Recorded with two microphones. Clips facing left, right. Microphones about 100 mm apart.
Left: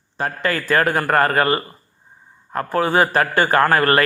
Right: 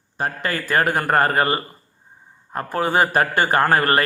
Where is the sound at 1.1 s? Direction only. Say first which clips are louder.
Left 1 dB; 30° right (ahead or behind).